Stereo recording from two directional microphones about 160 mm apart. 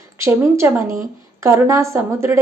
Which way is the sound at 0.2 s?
15° right (ahead or behind).